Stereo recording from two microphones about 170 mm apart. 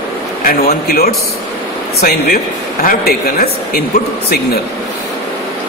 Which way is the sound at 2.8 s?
60° left (ahead or behind).